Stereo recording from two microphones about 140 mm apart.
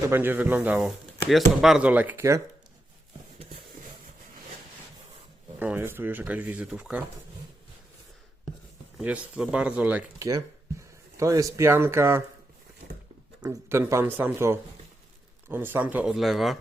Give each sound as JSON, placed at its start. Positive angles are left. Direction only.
{"t": 0.1, "sound": "speech", "side_deg": -15}
{"t": 5.5, "sound": "speech", "side_deg": -15}
{"t": 9.0, "sound": "speech", "side_deg": -10}
{"t": 10.2, "sound": "speech", "side_deg": -25}
{"t": 13.4, "sound": "speech", "side_deg": -20}